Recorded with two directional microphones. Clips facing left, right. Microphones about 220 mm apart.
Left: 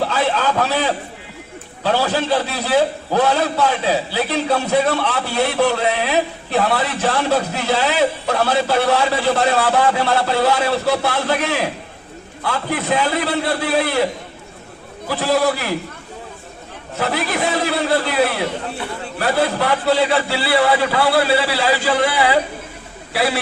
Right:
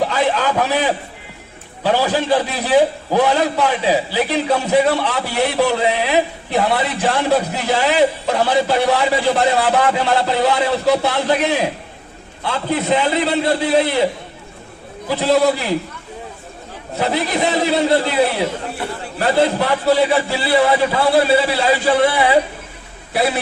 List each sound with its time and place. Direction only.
0.0 s a man's voice: 15° right (ahead or behind)
15.0 s a man's voice: 20° right (ahead or behind)
17.0 s a man's voice: 20° right (ahead or behind)